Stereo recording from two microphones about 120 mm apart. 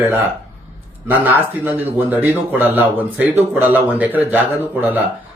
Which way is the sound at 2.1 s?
15° right (ahead or behind).